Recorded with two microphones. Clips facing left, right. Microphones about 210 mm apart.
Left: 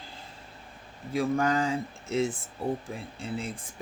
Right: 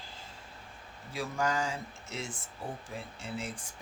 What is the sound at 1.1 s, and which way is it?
Speech, 55° left (ahead or behind).